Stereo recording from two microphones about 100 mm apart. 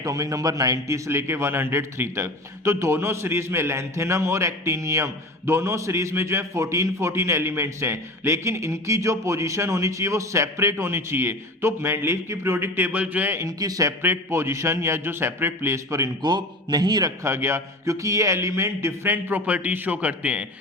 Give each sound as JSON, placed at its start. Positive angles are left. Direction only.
{"t": 0.0, "sound": "a man's voice", "side_deg": -35}
{"t": 13.6, "sound": "speech", "side_deg": -35}
{"t": 14.0, "sound": "a man's voice", "side_deg": -25}
{"t": 16.2, "sound": "a man's voice", "side_deg": -45}
{"t": 17.2, "sound": "a man's voice", "side_deg": -25}